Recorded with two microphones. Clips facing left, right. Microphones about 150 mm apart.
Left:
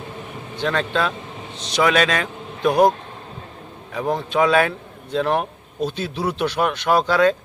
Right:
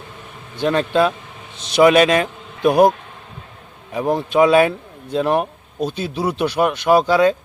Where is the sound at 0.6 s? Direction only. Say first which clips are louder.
Right 5 dB; 15° right (ahead or behind).